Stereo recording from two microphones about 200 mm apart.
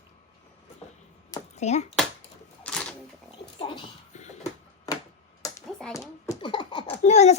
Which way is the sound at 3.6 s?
25° left (ahead or behind).